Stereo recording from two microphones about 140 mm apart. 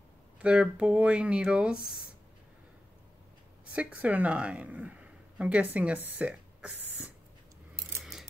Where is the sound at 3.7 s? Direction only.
10° right (ahead or behind).